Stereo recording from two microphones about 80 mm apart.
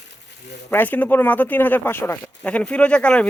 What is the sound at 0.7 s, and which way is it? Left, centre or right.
Speech, left.